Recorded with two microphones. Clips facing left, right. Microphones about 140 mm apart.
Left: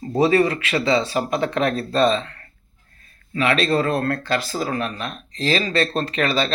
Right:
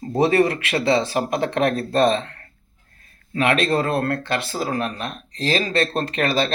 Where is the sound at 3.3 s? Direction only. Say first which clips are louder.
Even; 50° right (ahead or behind).